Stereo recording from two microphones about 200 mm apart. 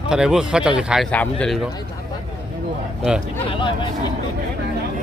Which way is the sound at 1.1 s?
5° left (ahead or behind).